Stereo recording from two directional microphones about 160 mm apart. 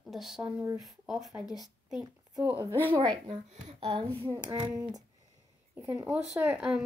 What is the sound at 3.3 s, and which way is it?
Speech, 45° right (ahead or behind).